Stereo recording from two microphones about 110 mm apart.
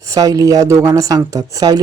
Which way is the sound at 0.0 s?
30° right (ahead or behind).